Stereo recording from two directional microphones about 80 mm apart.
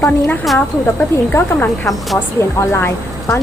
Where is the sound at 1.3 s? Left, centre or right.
Left.